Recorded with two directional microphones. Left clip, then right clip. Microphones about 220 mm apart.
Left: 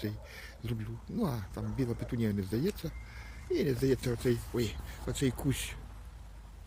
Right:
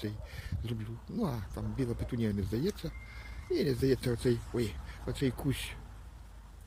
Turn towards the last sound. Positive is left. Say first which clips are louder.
# left 1 dB
turn(degrees=0)  # may be behind; listen again after turning